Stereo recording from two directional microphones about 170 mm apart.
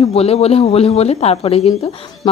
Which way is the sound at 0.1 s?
35° left (ahead or behind).